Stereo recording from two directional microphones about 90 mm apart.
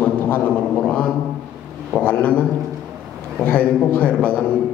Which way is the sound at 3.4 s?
15° left (ahead or behind).